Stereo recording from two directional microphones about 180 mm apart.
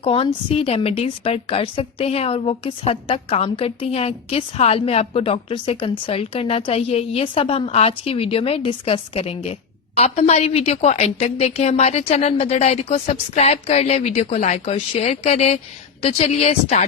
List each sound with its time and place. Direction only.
0.0 s a woman's voice: 30° left (ahead or behind)